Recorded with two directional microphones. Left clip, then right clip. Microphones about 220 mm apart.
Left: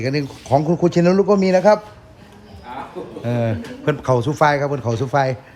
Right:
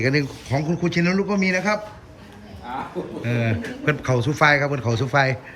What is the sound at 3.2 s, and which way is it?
Speech, 10° left (ahead or behind).